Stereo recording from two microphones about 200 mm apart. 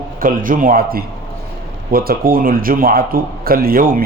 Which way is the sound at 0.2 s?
45° right (ahead or behind).